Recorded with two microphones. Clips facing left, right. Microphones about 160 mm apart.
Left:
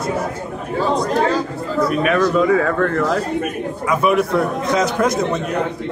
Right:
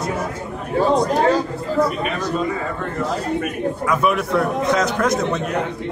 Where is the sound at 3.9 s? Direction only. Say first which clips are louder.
Left 4 dB; centre (ahead or behind).